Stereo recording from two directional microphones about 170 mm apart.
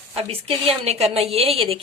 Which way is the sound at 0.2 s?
35° right (ahead or behind).